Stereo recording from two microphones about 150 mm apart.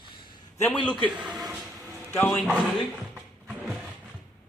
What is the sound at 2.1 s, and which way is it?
Speech, 15° left (ahead or behind).